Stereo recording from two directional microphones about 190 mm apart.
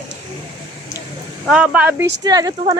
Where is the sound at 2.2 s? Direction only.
20° right (ahead or behind).